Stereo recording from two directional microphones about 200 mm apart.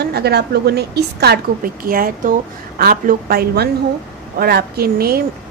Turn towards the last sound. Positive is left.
turn(degrees=-50)  # may be behind; listen again after turning